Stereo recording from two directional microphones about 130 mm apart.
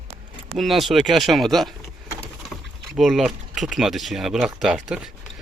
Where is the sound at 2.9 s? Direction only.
Centre (ahead or behind).